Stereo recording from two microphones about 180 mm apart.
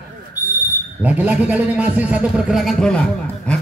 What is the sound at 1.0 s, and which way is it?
A man's voice, 10° right (ahead or behind).